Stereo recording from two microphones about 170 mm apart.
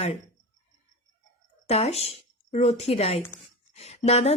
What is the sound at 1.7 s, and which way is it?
Speech, 40° left (ahead or behind).